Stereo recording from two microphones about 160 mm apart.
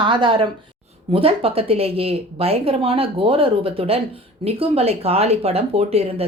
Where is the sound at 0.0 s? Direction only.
30° right (ahead or behind).